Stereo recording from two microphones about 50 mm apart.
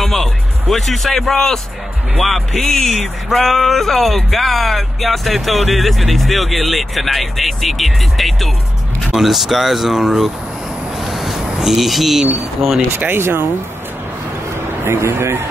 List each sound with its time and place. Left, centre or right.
0.0 s speech: centre
11.0 s a sound: centre
12.9 s speech: right
14.9 s speech: right